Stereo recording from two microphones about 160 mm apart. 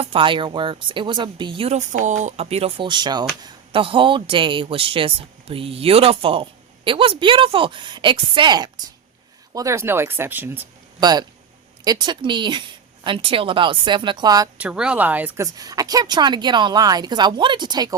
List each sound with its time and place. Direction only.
0.0 s speech: 35° right (ahead or behind); by 10.7 s 10° right (ahead or behind)
11.0 s speech: 25° right (ahead or behind)
14.6 s speech: 5° right (ahead or behind)
15.5 s speech: 25° right (ahead or behind)